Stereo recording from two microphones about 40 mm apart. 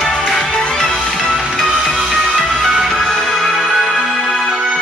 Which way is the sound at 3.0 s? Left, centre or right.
Centre.